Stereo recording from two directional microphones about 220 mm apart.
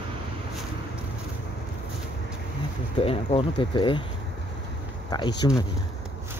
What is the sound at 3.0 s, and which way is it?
Speech, 25° left (ahead or behind).